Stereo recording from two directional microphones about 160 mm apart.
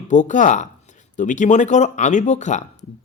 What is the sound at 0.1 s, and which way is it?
Speech, 50° left (ahead or behind).